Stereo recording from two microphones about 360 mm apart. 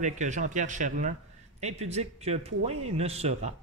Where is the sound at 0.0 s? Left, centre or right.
Centre.